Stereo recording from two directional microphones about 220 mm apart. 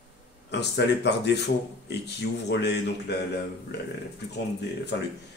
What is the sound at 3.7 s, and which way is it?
Speech, 50° left (ahead or behind).